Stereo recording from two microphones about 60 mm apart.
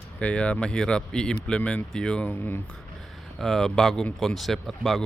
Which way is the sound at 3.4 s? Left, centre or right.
Centre.